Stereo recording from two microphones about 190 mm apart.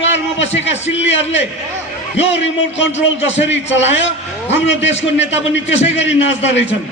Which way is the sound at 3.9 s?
70° left (ahead or behind).